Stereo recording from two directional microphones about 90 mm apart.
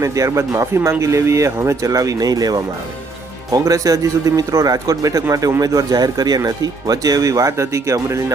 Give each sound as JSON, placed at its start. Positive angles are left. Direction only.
{"t": 0.0, "sound": "speech", "side_deg": -35}